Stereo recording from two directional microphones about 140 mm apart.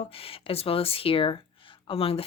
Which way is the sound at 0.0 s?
45° left (ahead or behind).